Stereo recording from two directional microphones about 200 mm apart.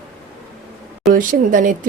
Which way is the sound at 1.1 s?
40° right (ahead or behind).